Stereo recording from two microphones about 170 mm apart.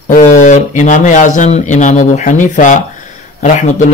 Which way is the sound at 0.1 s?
45° left (ahead or behind).